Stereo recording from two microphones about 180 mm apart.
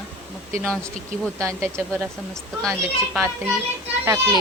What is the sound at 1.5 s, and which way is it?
Speech, 15° right (ahead or behind).